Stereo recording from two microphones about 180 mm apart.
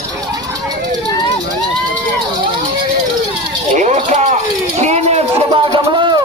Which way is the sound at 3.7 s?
40° right (ahead or behind).